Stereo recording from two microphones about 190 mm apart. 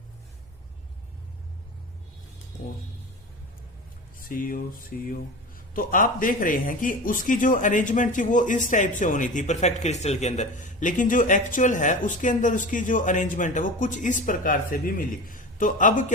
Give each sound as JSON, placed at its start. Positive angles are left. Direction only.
{"t": 4.3, "sound": "a man's voice", "side_deg": 50}